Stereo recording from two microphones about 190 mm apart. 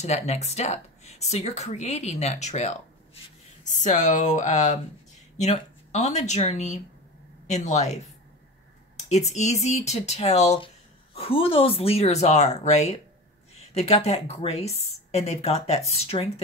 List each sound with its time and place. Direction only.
0.0 s speech: 35° left (ahead or behind)
9.1 s speech: 35° left (ahead or behind)